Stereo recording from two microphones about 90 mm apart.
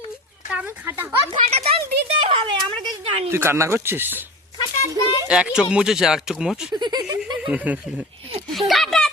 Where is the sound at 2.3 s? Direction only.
65° right (ahead or behind).